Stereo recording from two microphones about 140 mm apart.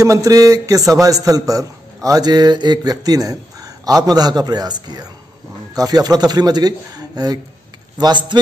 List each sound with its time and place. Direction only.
0.0 s a man's voice: 25° right (ahead or behind)